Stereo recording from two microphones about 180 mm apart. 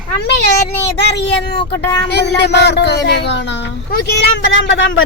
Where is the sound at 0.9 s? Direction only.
70° left (ahead or behind).